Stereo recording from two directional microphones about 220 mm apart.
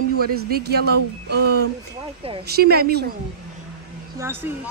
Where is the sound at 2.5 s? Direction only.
45° right (ahead or behind).